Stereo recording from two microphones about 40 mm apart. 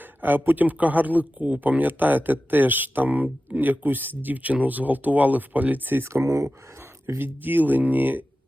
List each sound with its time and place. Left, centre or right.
0.0 s a man's voice: right
7.2 s a man's voice: right